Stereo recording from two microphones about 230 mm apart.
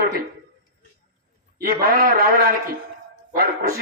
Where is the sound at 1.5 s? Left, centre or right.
Right.